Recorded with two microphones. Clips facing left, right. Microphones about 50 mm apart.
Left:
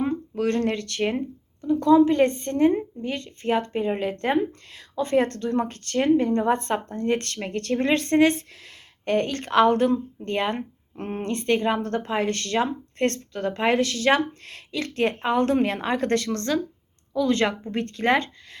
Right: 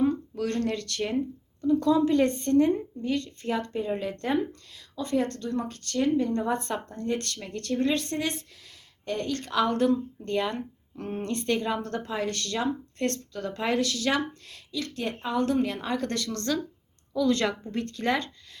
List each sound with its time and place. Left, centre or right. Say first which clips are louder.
0.0 s speech: left 2 dB; left
1.6 s speech: left 5 dB; left